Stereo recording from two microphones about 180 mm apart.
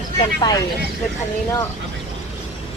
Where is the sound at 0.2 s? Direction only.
25° left (ahead or behind).